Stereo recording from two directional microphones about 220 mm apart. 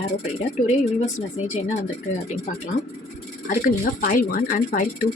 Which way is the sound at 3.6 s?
40° left (ahead or behind).